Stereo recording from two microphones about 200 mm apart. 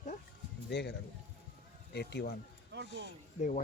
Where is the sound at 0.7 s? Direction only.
55° left (ahead or behind).